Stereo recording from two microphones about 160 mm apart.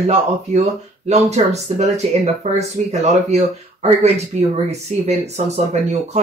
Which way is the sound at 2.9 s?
45° right (ahead or behind).